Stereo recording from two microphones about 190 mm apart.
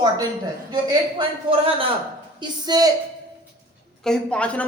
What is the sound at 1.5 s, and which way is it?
A woman's voice, 30° right (ahead or behind).